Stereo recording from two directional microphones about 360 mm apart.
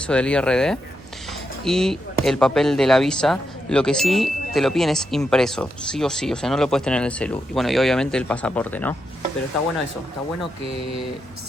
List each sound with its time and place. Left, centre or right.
0.0 s speech: centre